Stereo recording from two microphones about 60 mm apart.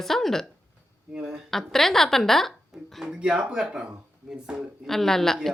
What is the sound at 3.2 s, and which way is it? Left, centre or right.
Speech, centre.